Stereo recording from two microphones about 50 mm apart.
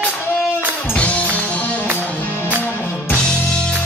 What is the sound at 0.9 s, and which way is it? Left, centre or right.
Music, left.